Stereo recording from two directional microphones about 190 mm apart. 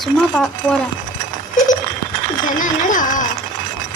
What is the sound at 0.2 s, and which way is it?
Speech, centre (ahead or behind).